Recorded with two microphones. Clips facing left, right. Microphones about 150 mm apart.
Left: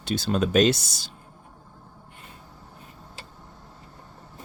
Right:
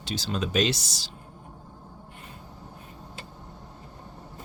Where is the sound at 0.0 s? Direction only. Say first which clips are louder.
Left 6 dB; 55° left (ahead or behind).